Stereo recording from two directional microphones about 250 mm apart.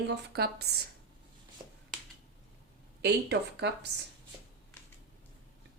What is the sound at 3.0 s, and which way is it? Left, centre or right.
Speech, right.